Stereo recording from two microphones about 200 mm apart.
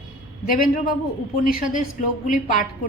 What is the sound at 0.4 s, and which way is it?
A woman's voice, 45° left (ahead or behind).